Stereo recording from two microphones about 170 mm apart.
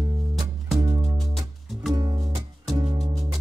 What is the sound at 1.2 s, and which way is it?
Music, centre (ahead or behind).